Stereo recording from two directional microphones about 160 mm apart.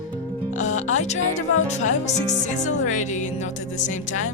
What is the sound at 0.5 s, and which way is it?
Music, 50° left (ahead or behind).